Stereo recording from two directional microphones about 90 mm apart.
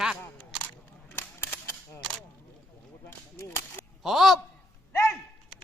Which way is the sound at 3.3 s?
30° left (ahead or behind).